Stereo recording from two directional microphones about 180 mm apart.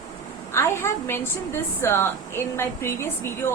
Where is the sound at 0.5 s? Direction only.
15° left (ahead or behind).